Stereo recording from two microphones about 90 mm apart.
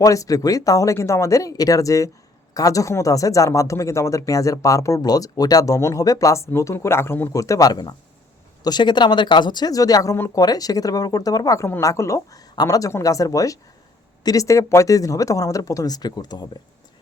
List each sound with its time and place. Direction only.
0.0 s speech: 40° left (ahead or behind)